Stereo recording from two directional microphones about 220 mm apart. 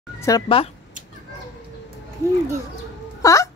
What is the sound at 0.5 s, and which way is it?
Speech, 25° left (ahead or behind).